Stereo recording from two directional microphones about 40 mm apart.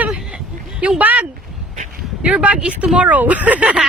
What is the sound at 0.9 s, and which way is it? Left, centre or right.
Speech, right.